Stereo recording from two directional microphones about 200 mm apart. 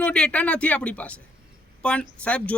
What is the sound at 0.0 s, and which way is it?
A man's voice, 5° left (ahead or behind).